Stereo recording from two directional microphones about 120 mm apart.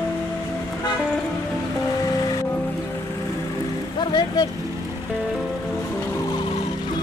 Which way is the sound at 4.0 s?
40° left (ahead or behind).